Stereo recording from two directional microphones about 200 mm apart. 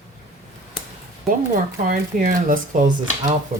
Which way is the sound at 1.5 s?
40° right (ahead or behind).